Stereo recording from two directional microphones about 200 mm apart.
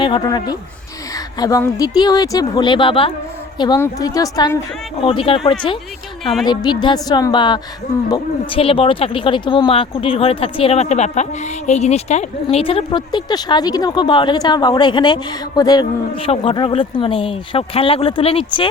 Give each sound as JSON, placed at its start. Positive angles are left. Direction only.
{"t": 0.0, "sound": "speech", "side_deg": 20}
{"t": 6.4, "sound": "speech", "side_deg": 20}